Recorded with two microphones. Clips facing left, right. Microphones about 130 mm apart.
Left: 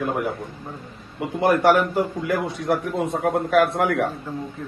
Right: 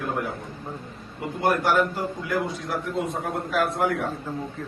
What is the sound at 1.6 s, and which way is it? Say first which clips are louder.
A man's voice: left 5 dB; 60° left (ahead or behind).